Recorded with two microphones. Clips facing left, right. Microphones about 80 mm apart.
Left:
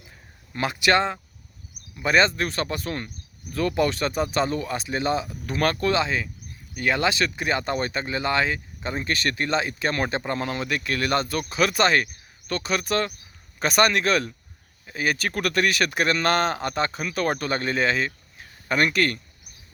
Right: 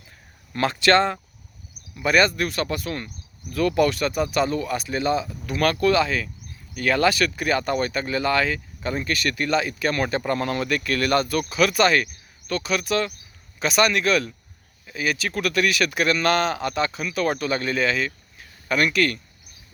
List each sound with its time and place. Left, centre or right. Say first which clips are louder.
0.5 s speech: right 3 dB; centre; by 19.2 s left